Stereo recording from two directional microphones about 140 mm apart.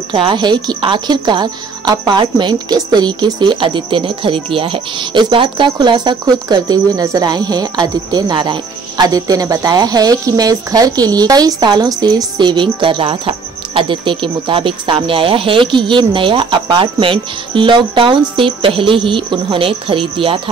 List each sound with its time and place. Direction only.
0.1 s speech: 35° right (ahead or behind)